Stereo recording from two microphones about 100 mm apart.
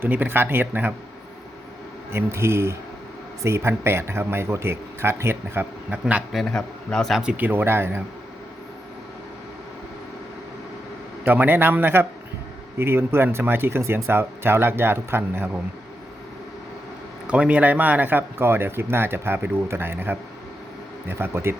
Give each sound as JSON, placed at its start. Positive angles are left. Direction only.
{"t": 0.0, "sound": "speech", "side_deg": -20}
{"t": 2.1, "sound": "speech", "side_deg": -25}
{"t": 5.9, "sound": "a man's voice", "side_deg": -15}
{"t": 6.3, "sound": "speech", "side_deg": 5}
{"t": 7.2, "sound": "speech", "side_deg": -15}
{"t": 11.3, "sound": "speech", "side_deg": -20}
{"t": 17.2, "sound": "speech", "side_deg": -10}